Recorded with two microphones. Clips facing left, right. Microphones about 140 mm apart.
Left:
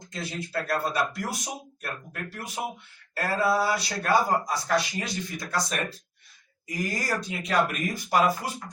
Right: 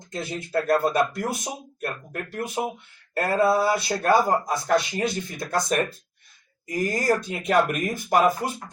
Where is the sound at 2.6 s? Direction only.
30° right (ahead or behind).